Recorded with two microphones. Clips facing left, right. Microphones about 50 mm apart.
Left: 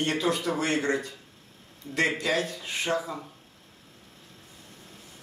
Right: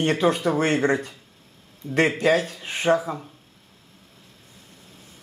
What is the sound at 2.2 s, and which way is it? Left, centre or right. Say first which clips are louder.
Speech: right 7 dB; right.